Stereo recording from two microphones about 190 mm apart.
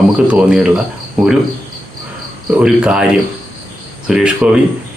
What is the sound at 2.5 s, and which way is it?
Speech, 5° right (ahead or behind).